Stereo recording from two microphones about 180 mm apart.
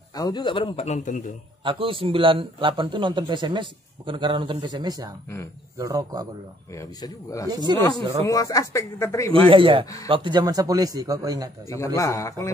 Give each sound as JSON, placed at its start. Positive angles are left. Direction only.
{"t": 0.1, "sound": "a man's voice", "side_deg": 20}
{"t": 1.6, "sound": "a man's voice", "side_deg": -30}
{"t": 6.7, "sound": "a man's voice", "side_deg": 20}
{"t": 7.4, "sound": "a man's voice", "side_deg": -25}
{"t": 8.3, "sound": "speech", "side_deg": 20}
{"t": 9.5, "sound": "a man's voice", "side_deg": -30}
{"t": 11.8, "sound": "speech", "side_deg": 15}